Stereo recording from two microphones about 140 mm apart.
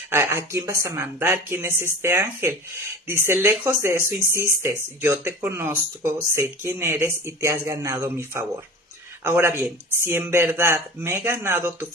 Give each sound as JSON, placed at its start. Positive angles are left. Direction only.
{"t": 0.1, "sound": "speech", "side_deg": -15}